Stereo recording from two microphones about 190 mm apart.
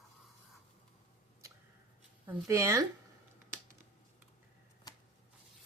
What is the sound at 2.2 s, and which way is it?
Speech, 15° right (ahead or behind).